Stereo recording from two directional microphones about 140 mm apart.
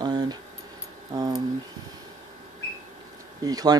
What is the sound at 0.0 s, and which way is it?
Keys jangling, 30° right (ahead or behind).